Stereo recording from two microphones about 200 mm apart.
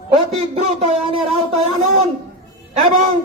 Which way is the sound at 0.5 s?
30° right (ahead or behind).